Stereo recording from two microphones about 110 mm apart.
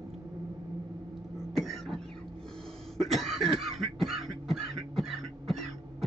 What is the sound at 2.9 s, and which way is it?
Cough, centre (ahead or behind).